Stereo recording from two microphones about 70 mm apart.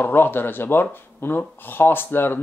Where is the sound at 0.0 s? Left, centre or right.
Left.